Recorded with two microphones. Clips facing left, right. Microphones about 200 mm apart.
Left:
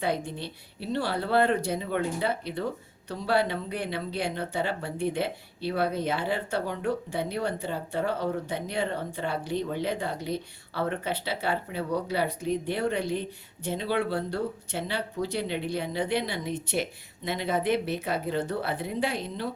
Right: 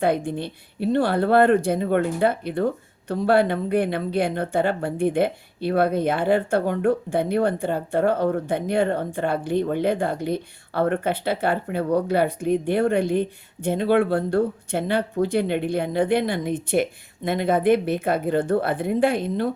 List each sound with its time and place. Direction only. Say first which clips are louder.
0.0 s speech: right 7 dB; 55° right (ahead or behind)